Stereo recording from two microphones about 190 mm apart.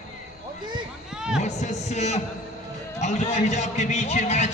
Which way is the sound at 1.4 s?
35° left (ahead or behind).